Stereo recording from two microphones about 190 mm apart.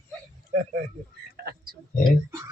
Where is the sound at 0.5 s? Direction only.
40° right (ahead or behind).